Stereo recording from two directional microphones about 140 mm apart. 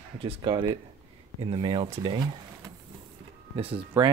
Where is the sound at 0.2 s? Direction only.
40° right (ahead or behind).